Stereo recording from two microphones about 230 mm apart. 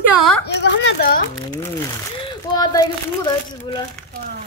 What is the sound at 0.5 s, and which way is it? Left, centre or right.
Speech, left.